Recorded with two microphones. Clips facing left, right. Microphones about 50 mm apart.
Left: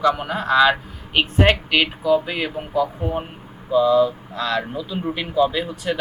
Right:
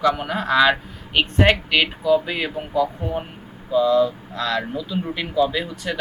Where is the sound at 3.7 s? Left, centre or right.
Centre.